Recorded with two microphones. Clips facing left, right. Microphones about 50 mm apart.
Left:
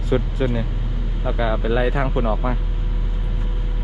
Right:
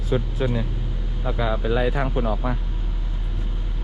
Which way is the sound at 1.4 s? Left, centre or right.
Left.